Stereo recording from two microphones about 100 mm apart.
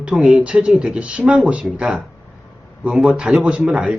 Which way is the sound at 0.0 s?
10° right (ahead or behind).